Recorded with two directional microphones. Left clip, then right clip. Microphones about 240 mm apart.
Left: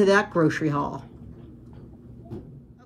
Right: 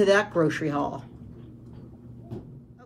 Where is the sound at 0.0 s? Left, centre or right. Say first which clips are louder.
Left 1 dB; left.